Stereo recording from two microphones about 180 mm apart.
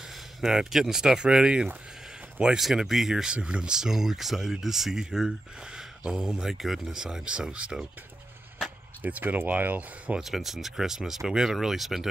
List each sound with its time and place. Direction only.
0.4 s speech: 5° right (ahead or behind)